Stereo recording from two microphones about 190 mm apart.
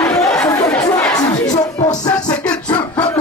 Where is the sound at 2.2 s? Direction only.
5° left (ahead or behind).